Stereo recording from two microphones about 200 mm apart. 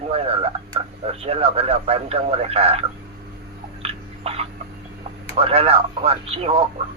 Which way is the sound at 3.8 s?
30° right (ahead or behind).